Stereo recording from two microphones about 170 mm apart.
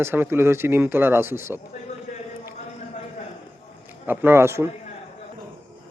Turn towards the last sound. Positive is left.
turn(degrees=-15)  # may be behind; listen again after turning